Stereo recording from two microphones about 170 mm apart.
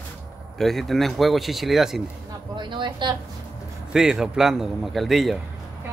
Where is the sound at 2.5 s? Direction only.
25° right (ahead or behind).